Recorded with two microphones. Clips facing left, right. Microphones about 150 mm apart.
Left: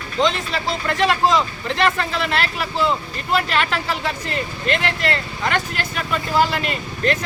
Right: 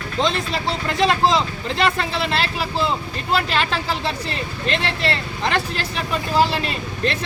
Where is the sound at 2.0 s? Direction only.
25° right (ahead or behind).